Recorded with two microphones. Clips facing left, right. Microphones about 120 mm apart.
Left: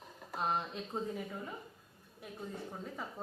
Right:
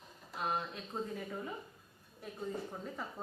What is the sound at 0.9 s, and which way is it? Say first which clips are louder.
Speech: left 1 dB; 20° left (ahead or behind).